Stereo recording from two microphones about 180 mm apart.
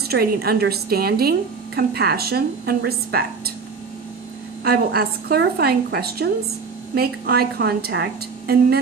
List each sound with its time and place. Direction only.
0.0 s a woman's voice: 60° right (ahead or behind)
4.6 s a woman's voice: 60° right (ahead or behind)